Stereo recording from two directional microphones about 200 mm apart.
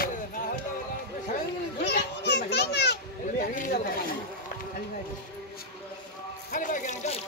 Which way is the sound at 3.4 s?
40° left (ahead or behind).